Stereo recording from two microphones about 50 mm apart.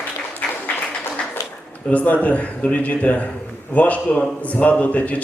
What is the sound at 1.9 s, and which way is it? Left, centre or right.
A man's voice, left.